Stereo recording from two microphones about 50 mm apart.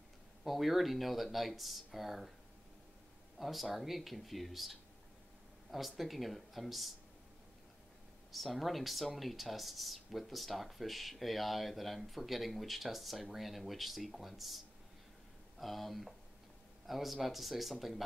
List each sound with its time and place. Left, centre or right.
0.4 s speech: centre
3.3 s speech: centre
8.3 s speech: centre
15.6 s speech: centre